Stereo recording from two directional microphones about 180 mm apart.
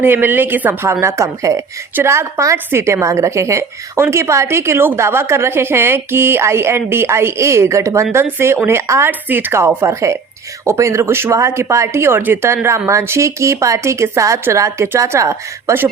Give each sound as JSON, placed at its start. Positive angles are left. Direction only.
{"t": 0.0, "sound": "a woman's voice", "side_deg": -10}